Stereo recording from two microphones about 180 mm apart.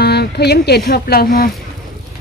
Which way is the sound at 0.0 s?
65° left (ahead or behind).